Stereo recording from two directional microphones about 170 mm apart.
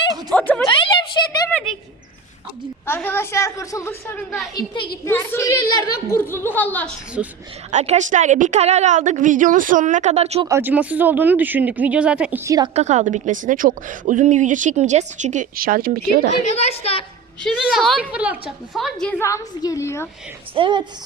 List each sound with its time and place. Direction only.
0.3 s speech: 5° left (ahead or behind)
0.7 s a sound: 30° left (ahead or behind)
2.8 s a woman's voice: 10° left (ahead or behind)
4.5 s a woman's voice: 30° left (ahead or behind)
5.0 s a woman's voice: 15° left (ahead or behind)
7.2 s a woman's voice: 5° right (ahead or behind)
7.7 s a woman's voice: 45° right (ahead or behind)
10.4 s speech: 15° right (ahead or behind)
12.7 s a woman's voice: 40° right (ahead or behind); by 16.2 s 60° right (ahead or behind)
16.5 s a woman's voice: 40° left (ahead or behind)
17.4 s a woman's voice: centre (ahead or behind)
19.2 s a woman's voice: 20° left (ahead or behind)
20.6 s a woman's voice: 30° right (ahead or behind)